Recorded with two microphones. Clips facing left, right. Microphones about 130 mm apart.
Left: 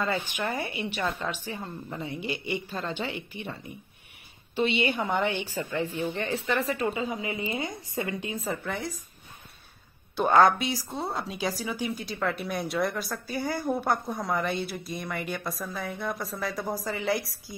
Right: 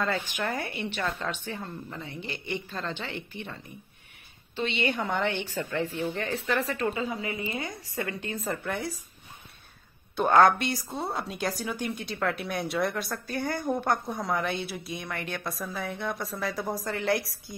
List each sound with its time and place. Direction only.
0.0 s a woman's voice: 5° left (ahead or behind)
4.6 s speech: 10° left (ahead or behind)
6.9 s speech: 20° left (ahead or behind)
8.4 s speech: centre (ahead or behind)
10.1 s speech: centre (ahead or behind)